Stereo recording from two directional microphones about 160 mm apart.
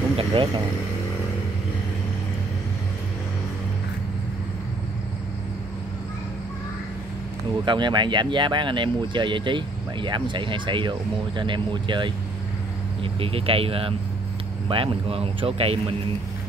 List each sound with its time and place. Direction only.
0.2 s vehicle: 30° right (ahead or behind)
7.6 s speech: 30° right (ahead or behind)